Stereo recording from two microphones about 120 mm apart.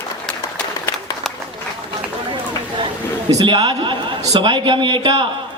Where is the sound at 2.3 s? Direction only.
45° right (ahead or behind).